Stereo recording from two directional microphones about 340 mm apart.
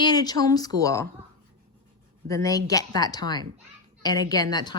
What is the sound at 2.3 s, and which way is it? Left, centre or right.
Speech, centre.